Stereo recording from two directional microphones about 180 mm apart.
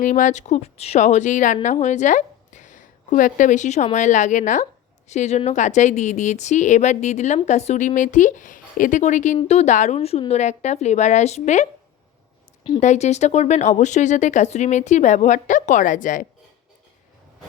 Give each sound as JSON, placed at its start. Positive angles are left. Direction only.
{"t": 0.0, "sound": "a woman's voice", "side_deg": 45}
{"t": 12.8, "sound": "speech", "side_deg": 40}